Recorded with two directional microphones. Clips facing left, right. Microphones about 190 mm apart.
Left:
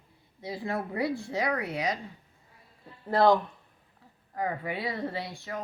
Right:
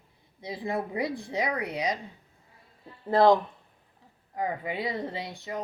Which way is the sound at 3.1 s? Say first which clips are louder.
Right 2 dB; 20° right (ahead or behind).